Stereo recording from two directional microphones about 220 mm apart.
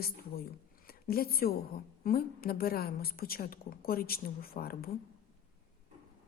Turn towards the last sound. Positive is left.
turn(degrees=45)  # may be behind; listen again after turning